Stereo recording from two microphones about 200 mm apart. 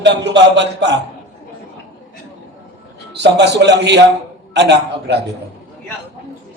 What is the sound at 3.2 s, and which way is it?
A man's voice, 60° right (ahead or behind).